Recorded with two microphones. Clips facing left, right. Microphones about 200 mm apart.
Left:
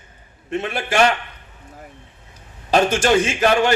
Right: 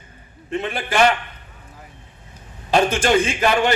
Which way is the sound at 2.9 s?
45° left (ahead or behind).